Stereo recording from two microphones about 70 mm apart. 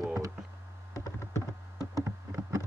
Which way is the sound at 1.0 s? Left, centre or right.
Left.